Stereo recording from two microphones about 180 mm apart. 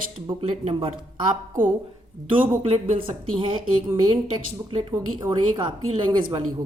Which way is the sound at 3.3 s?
30° right (ahead or behind).